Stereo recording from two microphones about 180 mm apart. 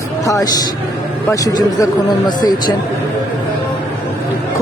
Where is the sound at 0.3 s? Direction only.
20° left (ahead or behind).